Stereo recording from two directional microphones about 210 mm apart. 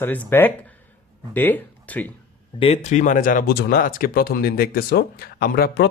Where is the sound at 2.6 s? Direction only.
30° left (ahead or behind).